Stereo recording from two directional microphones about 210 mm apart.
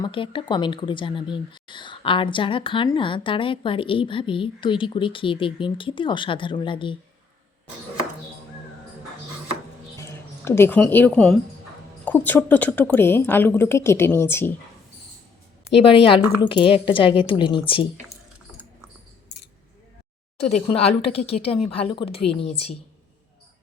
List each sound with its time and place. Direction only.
0.0 s speech: 25° left (ahead or behind)
10.0 s a woman's voice: 10° left (ahead or behind)
15.7 s speech: 25° left (ahead or behind)
20.5 s speech: 30° left (ahead or behind)